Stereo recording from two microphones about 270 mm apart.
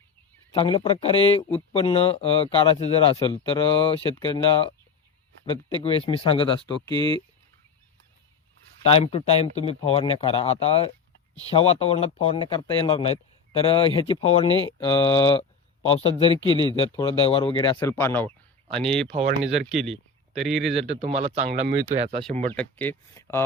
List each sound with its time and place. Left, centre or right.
0.5 s speech: centre
8.9 s speech: left; by 19.0 s centre
19.0 s speech: right
19.6 s speech: centre
20.7 s speech: right
22.5 s speech: centre